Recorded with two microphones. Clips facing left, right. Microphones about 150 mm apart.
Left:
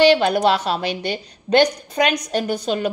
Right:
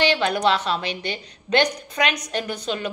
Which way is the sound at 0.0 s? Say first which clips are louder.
Left 6 dB; 40° left (ahead or behind).